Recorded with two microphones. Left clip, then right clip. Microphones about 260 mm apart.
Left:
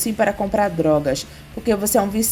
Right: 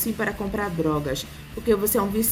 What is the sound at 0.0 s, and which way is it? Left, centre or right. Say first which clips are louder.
A woman's voice: left 8 dB; centre.